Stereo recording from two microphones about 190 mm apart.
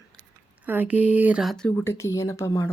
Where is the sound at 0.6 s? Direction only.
10° right (ahead or behind).